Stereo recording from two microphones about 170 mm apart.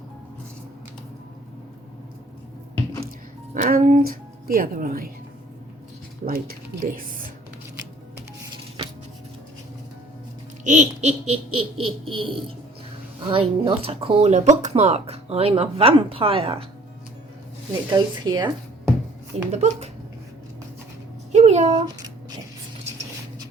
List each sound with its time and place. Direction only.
3.5 s speech: 55° right (ahead or behind)
6.2 s speech: 60° right (ahead or behind)
10.6 s speech: 45° right (ahead or behind)
17.9 s speech: 25° right (ahead or behind)
19.5 s speech: 40° right (ahead or behind)
21.3 s speech: 40° right (ahead or behind)
21.8 s a sound: 20° right (ahead or behind)